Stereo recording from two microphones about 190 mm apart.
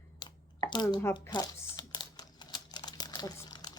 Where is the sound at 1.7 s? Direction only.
20° left (ahead or behind).